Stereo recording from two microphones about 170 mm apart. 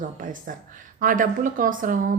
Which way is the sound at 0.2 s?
55° right (ahead or behind).